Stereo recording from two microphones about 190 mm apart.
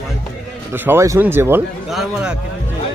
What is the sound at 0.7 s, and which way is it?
A man's voice, 10° right (ahead or behind).